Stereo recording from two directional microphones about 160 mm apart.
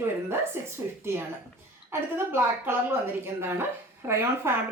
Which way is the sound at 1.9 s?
15° right (ahead or behind).